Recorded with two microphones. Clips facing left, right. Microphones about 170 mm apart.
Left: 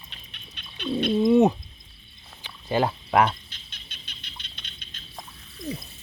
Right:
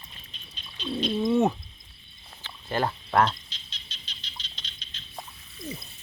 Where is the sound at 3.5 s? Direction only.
55° left (ahead or behind).